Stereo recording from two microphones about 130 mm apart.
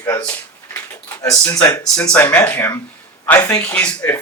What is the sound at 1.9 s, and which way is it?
Speech, 10° left (ahead or behind).